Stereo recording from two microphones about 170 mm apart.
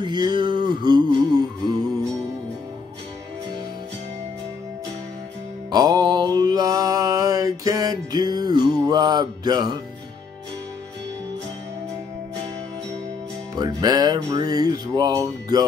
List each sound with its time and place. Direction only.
0.0 s music: 25° right (ahead or behind)
5.7 s mantra: 25° right (ahead or behind)
13.6 s music: 25° right (ahead or behind)